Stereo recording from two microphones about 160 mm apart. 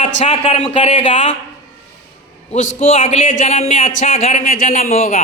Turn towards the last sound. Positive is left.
turn(degrees=50)  # may be behind; listen again after turning